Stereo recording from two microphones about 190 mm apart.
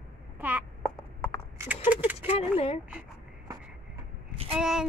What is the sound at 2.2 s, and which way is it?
Speech, 30° left (ahead or behind).